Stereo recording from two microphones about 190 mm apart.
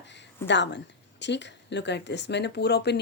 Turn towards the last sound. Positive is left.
turn(degrees=60)  # may be behind; listen again after turning